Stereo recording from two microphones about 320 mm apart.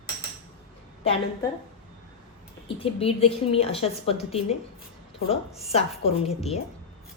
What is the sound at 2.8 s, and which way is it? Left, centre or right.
A woman's voice, centre.